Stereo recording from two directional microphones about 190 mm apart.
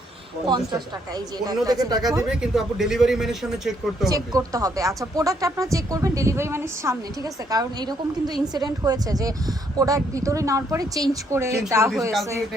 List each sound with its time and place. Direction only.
0.4 s a woman's voice: 20° right (ahead or behind)
2.2 s a man's voice: 5° right (ahead or behind)
4.1 s a woman's voice: 20° right (ahead or behind)